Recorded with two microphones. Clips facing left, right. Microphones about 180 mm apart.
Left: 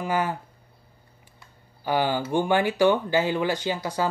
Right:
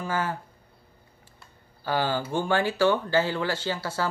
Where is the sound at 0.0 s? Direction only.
15° left (ahead or behind).